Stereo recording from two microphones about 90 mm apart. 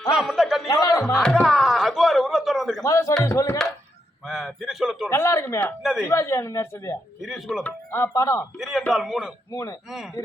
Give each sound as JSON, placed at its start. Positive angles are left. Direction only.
{"t": 0.1, "sound": "a sound", "side_deg": -5}
{"t": 0.7, "sound": "speech", "side_deg": 45}
{"t": 1.2, "sound": "a sound", "side_deg": 5}
{"t": 2.8, "sound": "speech", "side_deg": 35}
{"t": 4.3, "sound": "a sound", "side_deg": -5}
{"t": 5.0, "sound": "a man's voice", "side_deg": 30}
{"t": 7.2, "sound": "a man's voice", "side_deg": 0}
{"t": 7.9, "sound": "speech", "side_deg": 30}
{"t": 8.5, "sound": "a man's voice", "side_deg": 0}
{"t": 9.5, "sound": "speech", "side_deg": 35}